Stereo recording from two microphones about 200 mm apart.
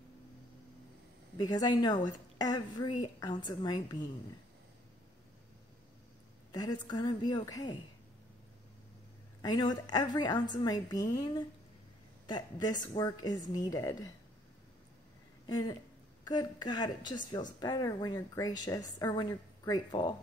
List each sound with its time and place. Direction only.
1.4 s a woman's voice: 20° left (ahead or behind)
6.5 s a woman's voice: 20° left (ahead or behind)
9.4 s a woman's voice: 20° left (ahead or behind)
15.4 s a woman's voice: 20° left (ahead or behind)